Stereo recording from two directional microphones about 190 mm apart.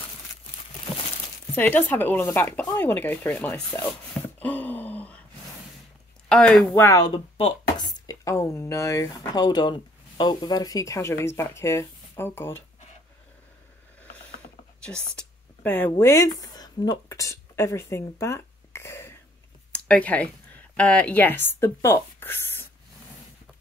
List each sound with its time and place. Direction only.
1.5 s speech: 10° left (ahead or behind)
4.4 s a sound: 10° left (ahead or behind)
6.2 s speech: 5° left (ahead or behind)
7.3 s speech: 30° left (ahead or behind)
8.1 s speech: 15° left (ahead or behind)
14.8 s speech: 5° left (ahead or behind)